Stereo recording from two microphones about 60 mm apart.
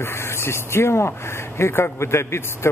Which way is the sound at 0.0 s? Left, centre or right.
Left.